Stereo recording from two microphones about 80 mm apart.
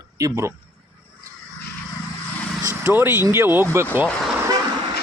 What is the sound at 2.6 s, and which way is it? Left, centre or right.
Vehicle, right.